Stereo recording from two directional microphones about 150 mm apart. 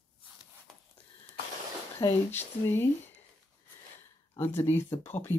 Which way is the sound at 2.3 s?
15° left (ahead or behind).